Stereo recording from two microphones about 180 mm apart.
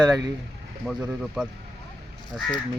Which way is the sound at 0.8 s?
5° right (ahead or behind).